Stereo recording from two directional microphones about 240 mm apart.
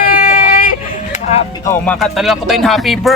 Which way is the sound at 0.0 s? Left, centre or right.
Left.